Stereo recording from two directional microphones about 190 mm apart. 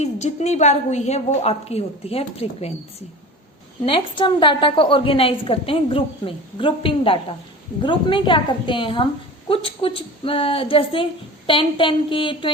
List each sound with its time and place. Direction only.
0.0 s a woman's voice: 35° left (ahead or behind)
3.8 s a woman's voice: 25° left (ahead or behind)